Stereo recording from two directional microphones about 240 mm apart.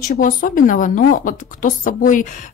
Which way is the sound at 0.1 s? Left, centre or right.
Left.